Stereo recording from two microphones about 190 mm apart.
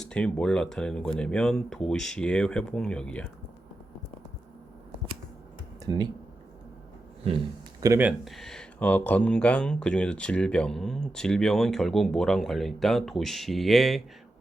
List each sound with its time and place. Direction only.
0.0 s speech: 5° left (ahead or behind)
5.8 s speech: 20° right (ahead or behind)
7.8 s speech: 15° right (ahead or behind)